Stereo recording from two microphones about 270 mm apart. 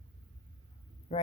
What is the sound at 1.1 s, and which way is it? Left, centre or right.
Speech, left.